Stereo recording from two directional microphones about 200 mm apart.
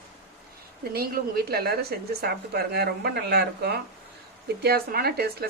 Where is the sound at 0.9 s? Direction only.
50° right (ahead or behind).